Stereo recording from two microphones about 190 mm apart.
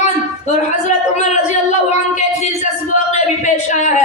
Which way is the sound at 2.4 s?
35° left (ahead or behind).